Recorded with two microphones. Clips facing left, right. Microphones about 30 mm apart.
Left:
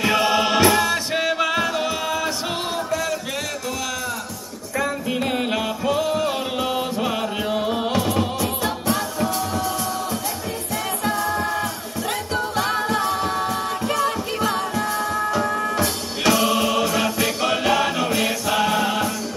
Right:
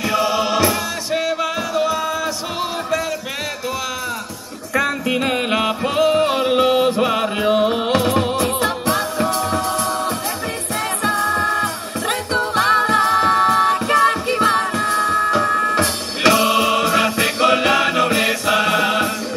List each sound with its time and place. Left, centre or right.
0.0 s music: centre
5.1 s music: right
5.5 s music: right
7.9 s music: right
11.1 s music: right